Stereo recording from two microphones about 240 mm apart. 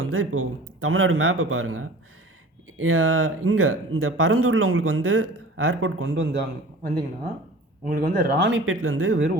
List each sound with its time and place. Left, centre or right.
0.0 s speech: right
7.9 s speech: right